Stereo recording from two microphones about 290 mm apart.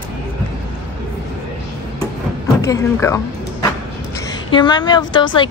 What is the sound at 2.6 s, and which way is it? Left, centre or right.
Speech, centre.